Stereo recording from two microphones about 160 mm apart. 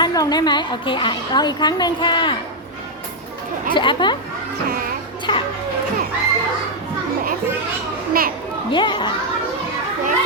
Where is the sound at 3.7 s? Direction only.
30° left (ahead or behind).